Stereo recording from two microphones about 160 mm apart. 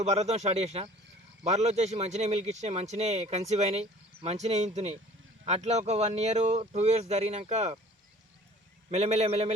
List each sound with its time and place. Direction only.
0.0 s speech: 45° right (ahead or behind)
8.9 s speech: 45° right (ahead or behind)